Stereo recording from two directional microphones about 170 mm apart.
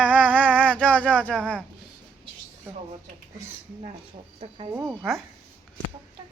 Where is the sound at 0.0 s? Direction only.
10° right (ahead or behind).